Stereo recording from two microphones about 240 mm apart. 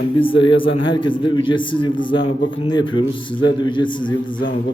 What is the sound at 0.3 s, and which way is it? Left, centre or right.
A man's voice, left.